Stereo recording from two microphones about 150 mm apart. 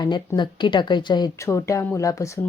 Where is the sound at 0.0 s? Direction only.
30° left (ahead or behind).